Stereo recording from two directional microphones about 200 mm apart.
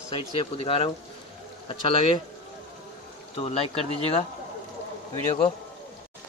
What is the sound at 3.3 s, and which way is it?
Speech, 25° left (ahead or behind).